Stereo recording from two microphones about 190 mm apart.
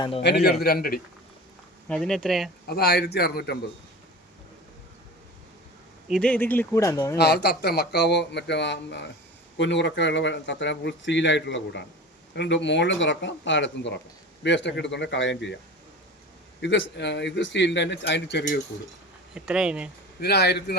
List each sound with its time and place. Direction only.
0.2 s a man's voice: 60° left (ahead or behind)
1.9 s speech: centre (ahead or behind)
2.6 s speech: 55° left (ahead or behind)
6.1 s speech: 5° left (ahead or behind)
7.2 s speech: 60° left (ahead or behind)
16.6 s a man's voice: 70° left (ahead or behind)
19.3 s speech: 5° right (ahead or behind)
20.1 s speech: 60° left (ahead or behind)